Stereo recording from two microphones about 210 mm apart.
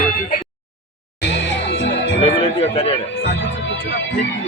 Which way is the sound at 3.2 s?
55° left (ahead or behind).